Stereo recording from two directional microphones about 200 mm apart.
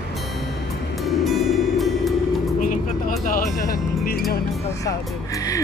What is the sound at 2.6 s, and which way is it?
Vehicle, 40° left (ahead or behind).